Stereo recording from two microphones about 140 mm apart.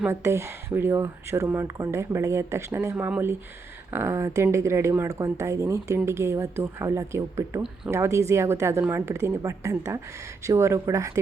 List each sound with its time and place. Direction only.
0.0 s speech: 20° right (ahead or behind)